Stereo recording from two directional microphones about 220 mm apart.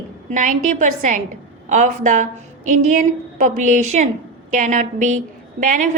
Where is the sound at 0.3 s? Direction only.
35° right (ahead or behind).